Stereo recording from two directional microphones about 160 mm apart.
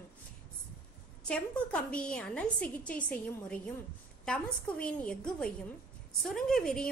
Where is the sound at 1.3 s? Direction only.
5° left (ahead or behind).